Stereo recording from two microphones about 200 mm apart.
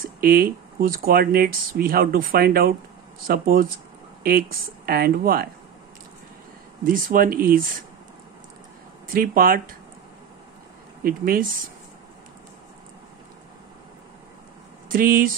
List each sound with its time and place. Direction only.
0.0 s speech: 45° right (ahead or behind)
6.8 s speech: 45° right (ahead or behind)
9.0 s speech: 45° right (ahead or behind)
11.1 s speech: 45° right (ahead or behind)
14.9 s speech: 45° right (ahead or behind)